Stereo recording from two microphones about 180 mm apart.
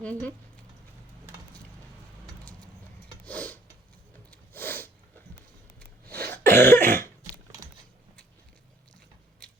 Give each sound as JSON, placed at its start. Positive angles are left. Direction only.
{"t": 0.0, "sound": "speech", "side_deg": 5}
{"t": 3.2, "sound": "a sound", "side_deg": 10}
{"t": 6.1, "sound": "throat clearing", "side_deg": -55}
{"t": 6.3, "sound": "cough", "side_deg": 15}